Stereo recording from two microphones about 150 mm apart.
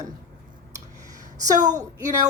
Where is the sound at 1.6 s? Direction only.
55° right (ahead or behind).